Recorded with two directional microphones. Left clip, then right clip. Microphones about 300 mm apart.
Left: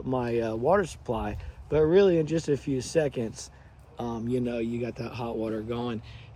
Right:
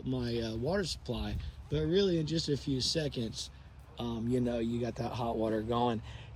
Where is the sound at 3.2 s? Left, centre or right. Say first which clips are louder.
Left 5 dB; centre.